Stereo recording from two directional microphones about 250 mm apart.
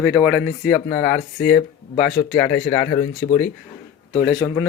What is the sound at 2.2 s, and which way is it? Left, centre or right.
Speech, left.